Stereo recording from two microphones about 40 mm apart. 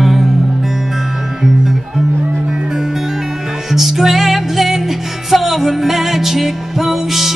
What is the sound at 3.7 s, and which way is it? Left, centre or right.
Music, centre.